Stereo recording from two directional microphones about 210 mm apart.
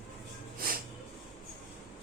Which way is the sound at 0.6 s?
45° right (ahead or behind).